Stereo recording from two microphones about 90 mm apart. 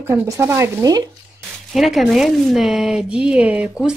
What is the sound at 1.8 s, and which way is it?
Speech, centre (ahead or behind).